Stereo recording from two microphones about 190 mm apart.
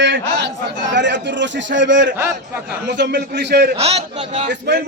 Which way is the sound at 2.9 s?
65° right (ahead or behind).